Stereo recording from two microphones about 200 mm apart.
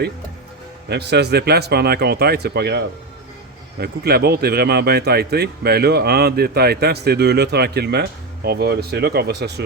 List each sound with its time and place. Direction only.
0.9 s speech: 55° right (ahead or behind)